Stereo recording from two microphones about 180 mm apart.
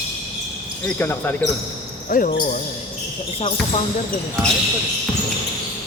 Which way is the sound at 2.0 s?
50° left (ahead or behind).